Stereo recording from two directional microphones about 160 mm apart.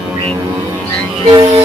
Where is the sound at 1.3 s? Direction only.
25° right (ahead or behind).